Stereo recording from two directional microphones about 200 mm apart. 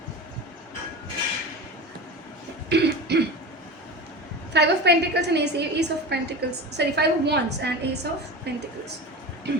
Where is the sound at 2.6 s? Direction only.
55° right (ahead or behind).